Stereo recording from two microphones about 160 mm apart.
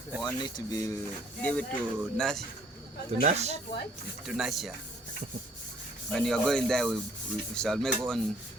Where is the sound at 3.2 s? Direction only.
40° right (ahead or behind).